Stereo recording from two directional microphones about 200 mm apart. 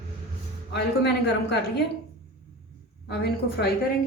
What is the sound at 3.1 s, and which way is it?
Speech, 55° left (ahead or behind).